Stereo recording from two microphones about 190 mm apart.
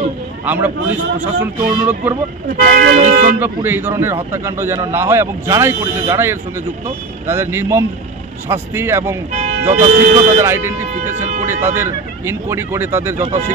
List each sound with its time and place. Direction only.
0.5 s a man's voice: 10° right (ahead or behind)
2.5 s speech: 50° right (ahead or behind)
3.0 s speech: 45° right (ahead or behind)
3.3 s a man's voice: 10° right (ahead or behind)
9.8 s speech: 45° right (ahead or behind)
10.4 s a man's voice: 15° right (ahead or behind)
11.1 s speech: 40° right (ahead or behind)
11.6 s a man's voice: 10° right (ahead or behind)